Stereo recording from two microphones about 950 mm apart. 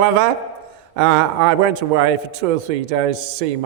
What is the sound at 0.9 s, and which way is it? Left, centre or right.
A man's voice, right.